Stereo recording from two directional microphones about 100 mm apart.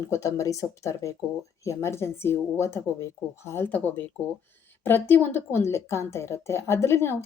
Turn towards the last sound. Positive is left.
turn(degrees=25)  # may be behind; listen again after turning